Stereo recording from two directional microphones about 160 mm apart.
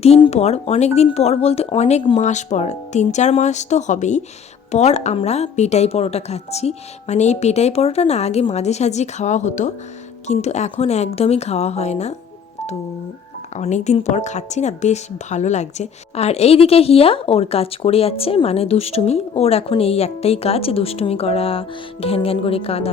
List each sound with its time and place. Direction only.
0.3 s a woman's voice: 40° left (ahead or behind)
13.6 s speech: 45° left (ahead or behind)